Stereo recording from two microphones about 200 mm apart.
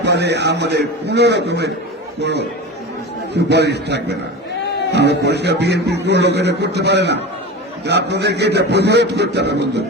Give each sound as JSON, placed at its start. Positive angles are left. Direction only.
{"t": 0.0, "sound": "a man's voice", "side_deg": -55}